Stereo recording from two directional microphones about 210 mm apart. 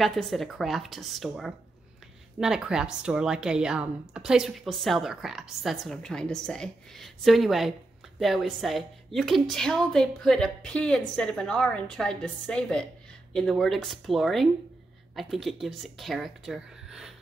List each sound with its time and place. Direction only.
0.0 s speech: centre (ahead or behind)